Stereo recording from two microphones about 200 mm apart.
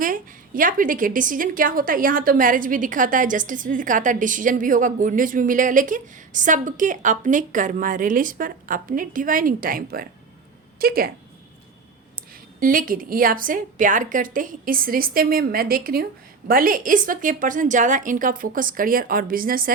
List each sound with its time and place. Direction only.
0.0 s a woman's voice: 40° right (ahead or behind)
12.5 s a woman's voice: 45° right (ahead or behind)